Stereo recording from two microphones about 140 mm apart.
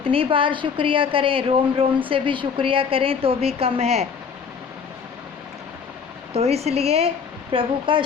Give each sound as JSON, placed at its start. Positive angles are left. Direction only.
{"t": 0.0, "sound": "a woman's voice", "side_deg": -40}
{"t": 6.3, "sound": "a woman's voice", "side_deg": -50}